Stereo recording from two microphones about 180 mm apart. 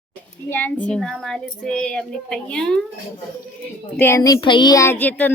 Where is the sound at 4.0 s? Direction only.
15° left (ahead or behind).